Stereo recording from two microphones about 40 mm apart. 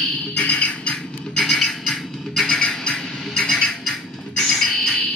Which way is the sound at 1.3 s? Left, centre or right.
Centre.